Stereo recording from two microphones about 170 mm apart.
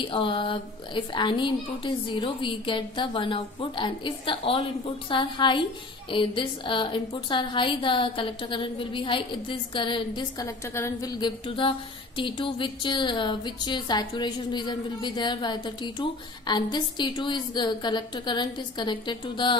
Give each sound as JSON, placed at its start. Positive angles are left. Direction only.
{"t": 0.0, "sound": "a woman's voice", "side_deg": 30}
{"t": 10.4, "sound": "a woman's voice", "side_deg": 15}